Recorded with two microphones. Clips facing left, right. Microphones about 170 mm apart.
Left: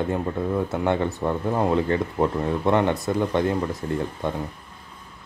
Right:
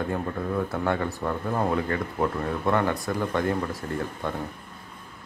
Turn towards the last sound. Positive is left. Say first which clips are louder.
# left 4 dB
turn(degrees=20)  # may be behind; listen again after turning